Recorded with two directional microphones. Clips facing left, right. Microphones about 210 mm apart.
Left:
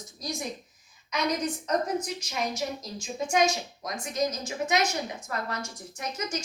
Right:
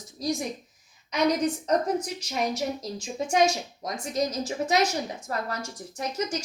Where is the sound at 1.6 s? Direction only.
35° right (ahead or behind).